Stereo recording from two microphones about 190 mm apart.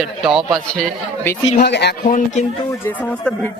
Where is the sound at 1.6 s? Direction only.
60° left (ahead or behind).